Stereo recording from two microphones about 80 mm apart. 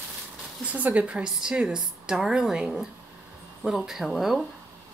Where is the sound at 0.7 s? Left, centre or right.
Centre.